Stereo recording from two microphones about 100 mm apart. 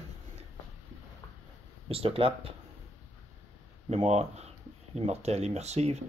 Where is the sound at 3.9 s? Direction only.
90° right.